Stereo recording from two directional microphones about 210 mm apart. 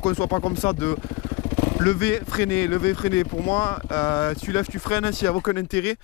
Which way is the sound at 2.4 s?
10° left (ahead or behind).